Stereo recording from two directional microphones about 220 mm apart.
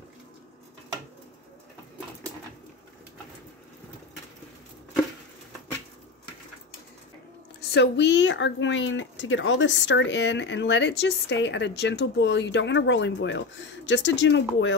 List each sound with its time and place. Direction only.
7.7 s speech: 50° left (ahead or behind)